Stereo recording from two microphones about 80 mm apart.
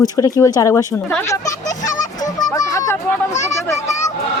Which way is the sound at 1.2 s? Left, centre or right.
Left.